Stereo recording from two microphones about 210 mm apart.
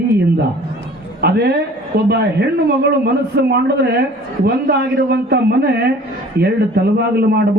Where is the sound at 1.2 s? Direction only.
50° right (ahead or behind).